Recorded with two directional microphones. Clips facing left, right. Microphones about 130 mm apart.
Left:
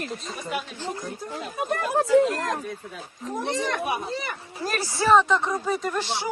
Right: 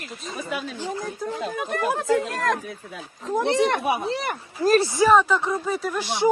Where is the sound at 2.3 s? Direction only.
90° right.